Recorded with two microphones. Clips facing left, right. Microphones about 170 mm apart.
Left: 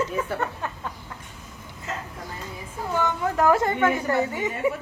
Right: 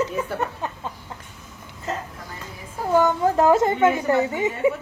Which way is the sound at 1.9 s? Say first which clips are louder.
Right 5 dB; 35° right (ahead or behind).